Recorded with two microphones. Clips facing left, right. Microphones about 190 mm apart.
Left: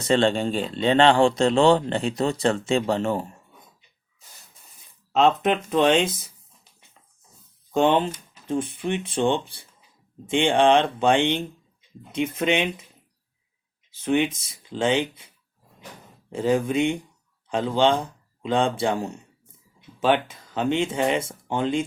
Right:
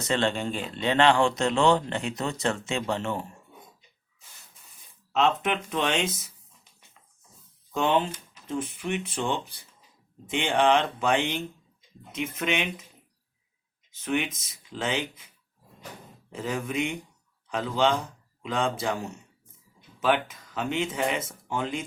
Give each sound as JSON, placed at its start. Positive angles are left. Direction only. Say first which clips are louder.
{"t": 0.0, "sound": "speech", "louder": "left 6 dB", "side_deg": 30}
{"t": 5.1, "sound": "speech", "louder": "left 5 dB", "side_deg": 35}
{"t": 7.7, "sound": "speech", "louder": "left 5 dB", "side_deg": 30}
{"t": 14.0, "sound": "speech", "louder": "left 6 dB", "side_deg": 30}
{"t": 16.3, "sound": "speech", "louder": "left 8 dB", "side_deg": 30}